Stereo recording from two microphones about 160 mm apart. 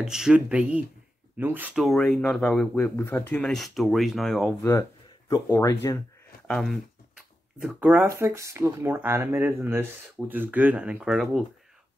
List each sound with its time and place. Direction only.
0.0 s speech: 5° right (ahead or behind)
1.9 s speech: 5° left (ahead or behind)
5.3 s speech: 20° left (ahead or behind)
6.4 s speech: centre (ahead or behind)